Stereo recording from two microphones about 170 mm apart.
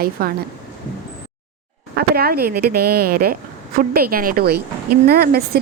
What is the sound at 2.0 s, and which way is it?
Speech, 65° right (ahead or behind).